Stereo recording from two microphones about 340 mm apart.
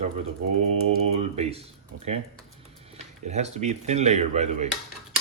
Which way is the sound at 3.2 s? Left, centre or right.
Centre.